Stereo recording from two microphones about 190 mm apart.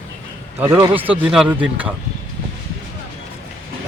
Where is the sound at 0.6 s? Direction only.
25° right (ahead or behind).